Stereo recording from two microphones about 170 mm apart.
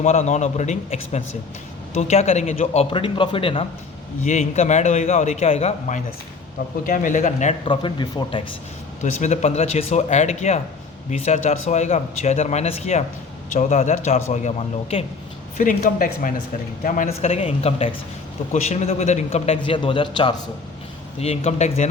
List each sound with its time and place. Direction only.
0.0 s a man's voice: 40° left (ahead or behind)
4.3 s speech: 40° left (ahead or behind)
6.8 s a man's voice: 50° left (ahead or behind)
7.6 s speech: 30° left (ahead or behind)
9.0 s a man's voice: 40° left (ahead or behind)
15.5 s a man's voice: 55° left (ahead or behind)
17.2 s speech: 40° left (ahead or behind)